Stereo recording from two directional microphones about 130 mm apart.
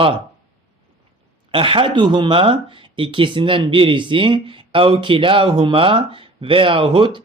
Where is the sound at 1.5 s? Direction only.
40° right (ahead or behind).